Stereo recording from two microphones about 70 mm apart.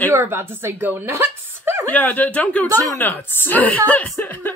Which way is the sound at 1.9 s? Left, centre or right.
Left.